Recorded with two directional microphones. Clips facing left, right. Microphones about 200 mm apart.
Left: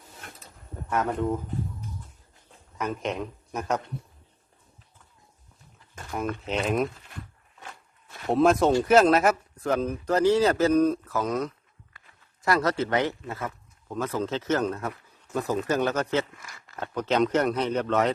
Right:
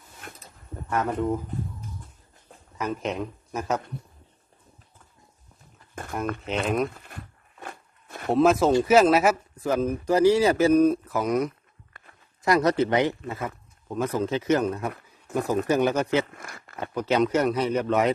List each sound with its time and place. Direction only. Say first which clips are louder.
2.7 s speech: right 1 dB; centre (ahead or behind)
5.9 s a sound: right 4 dB; 55° right (ahead or behind)
6.4 s speech: even; centre (ahead or behind)
7.6 s a sound: right 5 dB; 55° right (ahead or behind)
8.3 s speech: right 1 dB; centre (ahead or behind)
16.3 s speech: right 5 dB; 55° right (ahead or behind)
16.8 s speech: right 1 dB; 10° right (ahead or behind)